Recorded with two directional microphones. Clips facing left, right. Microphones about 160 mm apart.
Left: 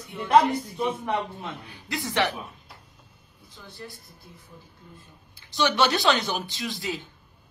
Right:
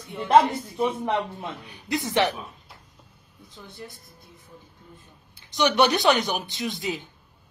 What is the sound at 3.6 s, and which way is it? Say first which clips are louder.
Speech: even; 20° right (ahead or behind).